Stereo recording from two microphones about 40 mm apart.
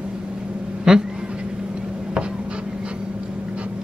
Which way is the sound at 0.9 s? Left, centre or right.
Centre.